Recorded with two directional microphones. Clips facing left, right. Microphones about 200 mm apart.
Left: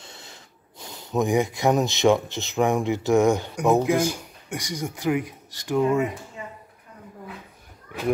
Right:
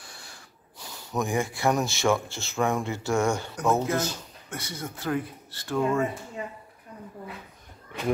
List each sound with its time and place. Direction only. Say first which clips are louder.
0.0 s speech: left 3 dB; 20° left (ahead or behind)